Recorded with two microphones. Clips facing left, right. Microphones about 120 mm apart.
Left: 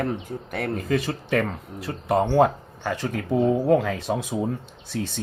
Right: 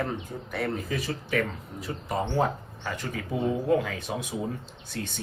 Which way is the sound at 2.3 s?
85° left.